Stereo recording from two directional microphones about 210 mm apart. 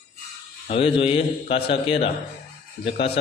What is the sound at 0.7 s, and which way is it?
A man's voice, 25° left (ahead or behind).